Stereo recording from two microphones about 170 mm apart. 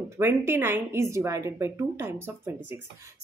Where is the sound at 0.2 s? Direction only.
15° right (ahead or behind).